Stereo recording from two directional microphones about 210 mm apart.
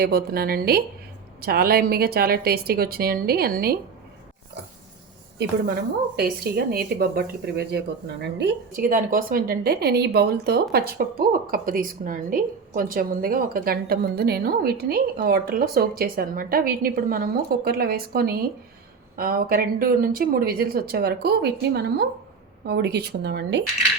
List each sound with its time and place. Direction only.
0.0 s a woman's voice: 50° right (ahead or behind)
5.4 s a woman's voice: 50° right (ahead or behind)